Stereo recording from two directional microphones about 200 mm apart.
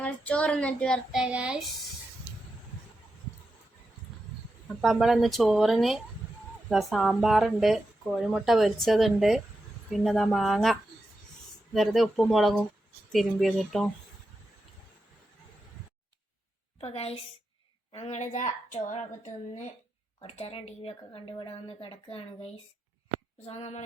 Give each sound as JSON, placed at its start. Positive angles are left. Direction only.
{"t": 0.0, "sound": "speech", "side_deg": 5}
{"t": 4.8, "sound": "speech", "side_deg": 0}
{"t": 16.8, "sound": "a woman's voice", "side_deg": 30}
{"t": 23.5, "sound": "a woman's voice", "side_deg": 30}